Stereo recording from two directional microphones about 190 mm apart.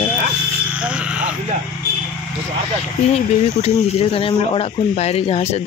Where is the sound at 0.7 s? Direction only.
5° right (ahead or behind).